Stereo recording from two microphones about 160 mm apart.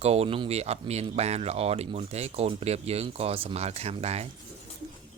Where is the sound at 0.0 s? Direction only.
40° right (ahead or behind).